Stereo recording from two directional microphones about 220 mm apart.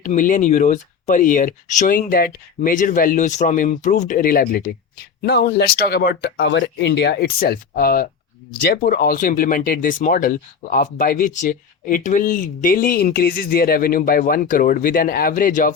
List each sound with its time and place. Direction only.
0.0 s speech: 35° left (ahead or behind)